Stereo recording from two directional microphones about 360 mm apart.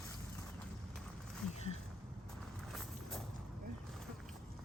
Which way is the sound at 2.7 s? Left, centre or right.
Centre.